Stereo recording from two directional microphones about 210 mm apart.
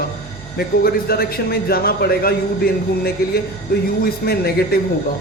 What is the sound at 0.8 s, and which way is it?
A man's voice, 45° left (ahead or behind).